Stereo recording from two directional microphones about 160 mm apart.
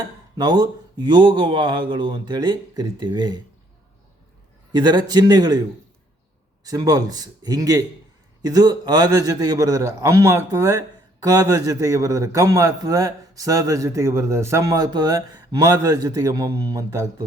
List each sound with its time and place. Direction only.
0.3 s a man's voice: 25° right (ahead or behind)
4.7 s a man's voice: 30° right (ahead or behind)
6.7 s a man's voice: 25° right (ahead or behind)